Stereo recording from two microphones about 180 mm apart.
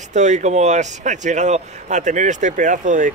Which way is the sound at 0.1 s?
40° right (ahead or behind).